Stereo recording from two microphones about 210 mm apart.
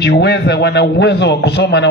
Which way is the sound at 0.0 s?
55° left (ahead or behind).